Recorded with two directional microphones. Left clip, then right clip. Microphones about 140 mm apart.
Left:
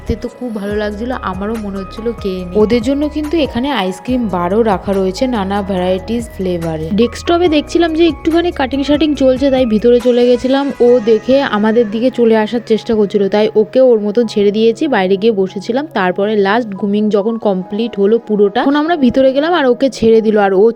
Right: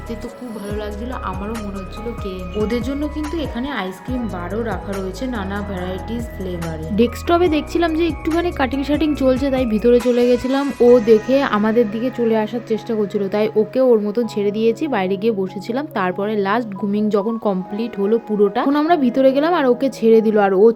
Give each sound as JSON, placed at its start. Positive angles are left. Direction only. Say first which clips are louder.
{"t": 0.7, "sound": "a woman's voice", "louder": "left 9 dB", "side_deg": 40}